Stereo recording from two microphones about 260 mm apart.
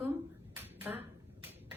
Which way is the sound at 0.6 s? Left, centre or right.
Centre.